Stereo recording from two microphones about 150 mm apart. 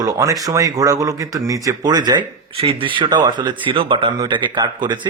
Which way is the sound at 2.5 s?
40° right (ahead or behind).